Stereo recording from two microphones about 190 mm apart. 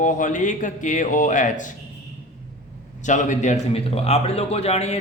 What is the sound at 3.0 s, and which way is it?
A man's voice, 40° left (ahead or behind).